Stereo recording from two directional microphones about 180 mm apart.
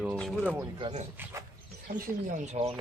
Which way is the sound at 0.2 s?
5° right (ahead or behind).